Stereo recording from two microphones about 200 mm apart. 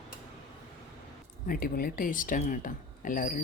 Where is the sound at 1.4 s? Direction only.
45° left (ahead or behind).